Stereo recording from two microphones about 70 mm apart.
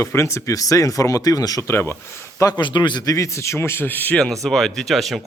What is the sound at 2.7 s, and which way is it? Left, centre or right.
Speech, left.